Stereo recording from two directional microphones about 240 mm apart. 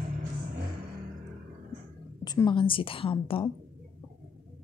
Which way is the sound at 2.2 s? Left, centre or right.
Centre.